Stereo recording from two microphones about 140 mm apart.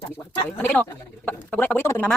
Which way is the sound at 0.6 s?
15° left (ahead or behind).